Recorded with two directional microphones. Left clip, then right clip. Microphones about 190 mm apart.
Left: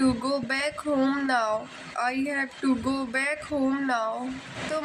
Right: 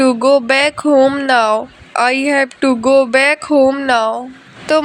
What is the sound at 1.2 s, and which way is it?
Speech, 45° right (ahead or behind).